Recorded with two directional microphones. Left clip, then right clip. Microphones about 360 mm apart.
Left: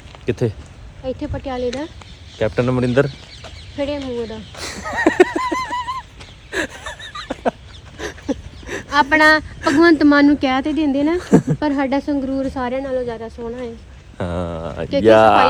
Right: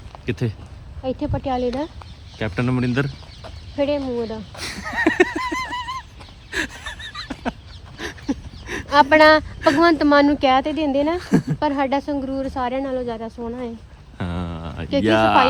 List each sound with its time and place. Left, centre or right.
0.3 s speech: centre
1.0 s speech: right
2.4 s speech: centre
3.8 s speech: right
4.5 s a sound: centre
8.9 s speech: right
11.2 s a woman's voice: centre
11.8 s a woman's voice: centre
14.2 s a sound: centre
15.0 s speech: centre